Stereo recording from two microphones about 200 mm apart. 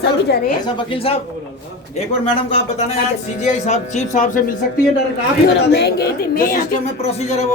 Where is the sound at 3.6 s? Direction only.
35° left (ahead or behind).